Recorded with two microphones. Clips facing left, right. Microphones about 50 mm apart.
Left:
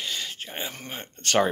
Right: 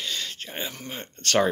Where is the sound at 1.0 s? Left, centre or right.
Centre.